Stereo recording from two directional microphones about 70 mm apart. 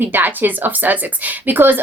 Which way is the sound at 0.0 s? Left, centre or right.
Right.